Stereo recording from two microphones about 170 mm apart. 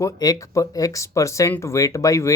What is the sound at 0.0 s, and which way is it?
Speech, 20° left (ahead or behind).